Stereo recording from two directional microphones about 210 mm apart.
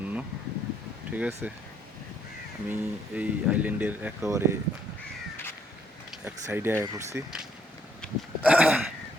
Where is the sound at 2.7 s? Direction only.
5° right (ahead or behind).